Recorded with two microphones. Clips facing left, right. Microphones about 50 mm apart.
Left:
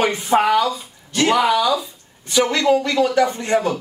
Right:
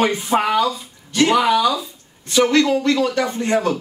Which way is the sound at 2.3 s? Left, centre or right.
Centre.